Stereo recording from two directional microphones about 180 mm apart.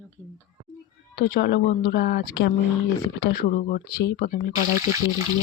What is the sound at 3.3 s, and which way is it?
Speech, 50° left (ahead or behind).